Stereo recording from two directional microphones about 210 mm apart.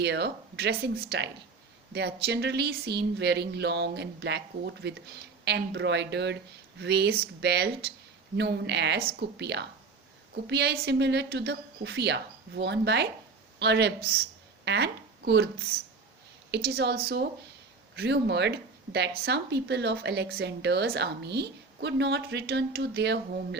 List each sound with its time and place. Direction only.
0.0 s a woman's voice: 50° right (ahead or behind)